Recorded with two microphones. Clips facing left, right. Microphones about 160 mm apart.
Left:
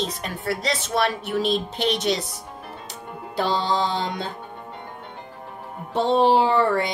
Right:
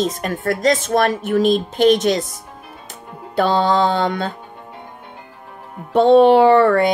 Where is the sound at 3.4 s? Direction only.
60° right (ahead or behind).